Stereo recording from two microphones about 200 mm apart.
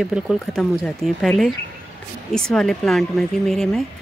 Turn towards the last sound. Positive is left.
turn(degrees=0)  # may be behind; listen again after turning